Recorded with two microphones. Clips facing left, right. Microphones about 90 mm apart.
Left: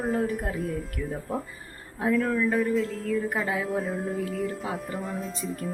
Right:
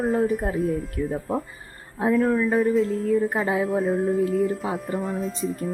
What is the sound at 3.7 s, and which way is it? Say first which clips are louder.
Speech: right 7 dB; centre (ahead or behind).